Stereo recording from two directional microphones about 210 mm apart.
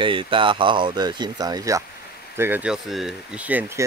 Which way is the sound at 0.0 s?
25° right (ahead or behind).